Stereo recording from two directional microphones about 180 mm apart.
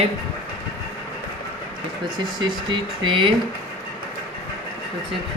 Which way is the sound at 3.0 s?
25° right (ahead or behind).